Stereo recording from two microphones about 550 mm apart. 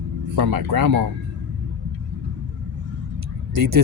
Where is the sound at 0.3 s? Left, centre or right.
Right.